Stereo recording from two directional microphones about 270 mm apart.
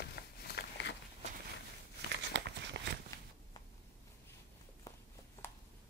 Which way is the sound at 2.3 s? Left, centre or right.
Right.